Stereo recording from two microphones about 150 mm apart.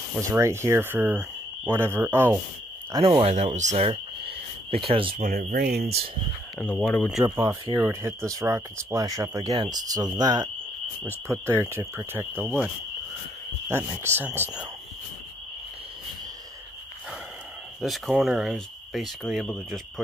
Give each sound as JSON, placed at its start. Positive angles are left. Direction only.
{"t": 0.2, "sound": "speech", "side_deg": -20}
{"t": 3.2, "sound": "speech", "side_deg": -50}
{"t": 5.2, "sound": "speech", "side_deg": -75}
{"t": 6.9, "sound": "speech", "side_deg": 0}
{"t": 7.2, "sound": "speech", "side_deg": -30}
{"t": 7.9, "sound": "speech", "side_deg": -15}
{"t": 12.4, "sound": "speech", "side_deg": -5}
{"t": 13.7, "sound": "speech", "side_deg": -15}
{"t": 17.7, "sound": "speech", "side_deg": 0}